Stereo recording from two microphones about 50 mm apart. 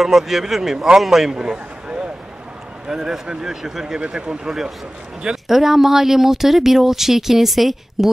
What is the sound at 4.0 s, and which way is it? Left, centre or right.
Speech, right.